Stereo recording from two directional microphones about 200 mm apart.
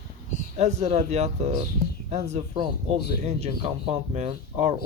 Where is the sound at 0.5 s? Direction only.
35° right (ahead or behind).